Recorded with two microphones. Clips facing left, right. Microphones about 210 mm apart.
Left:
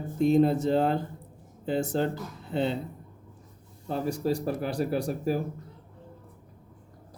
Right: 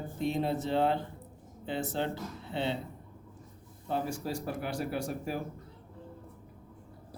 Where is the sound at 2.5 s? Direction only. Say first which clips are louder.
Left 5 dB; 45° left (ahead or behind).